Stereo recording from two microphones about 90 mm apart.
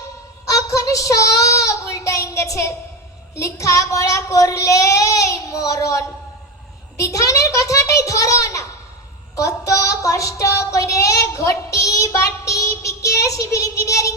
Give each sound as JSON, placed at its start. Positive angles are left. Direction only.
{"t": 0.4, "sound": "child singing", "side_deg": 40}